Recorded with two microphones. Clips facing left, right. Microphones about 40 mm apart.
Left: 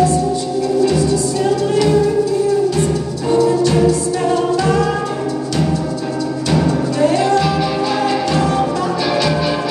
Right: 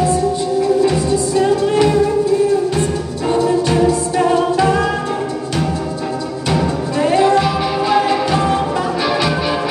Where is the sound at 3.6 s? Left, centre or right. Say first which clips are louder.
Left 1 dB; right.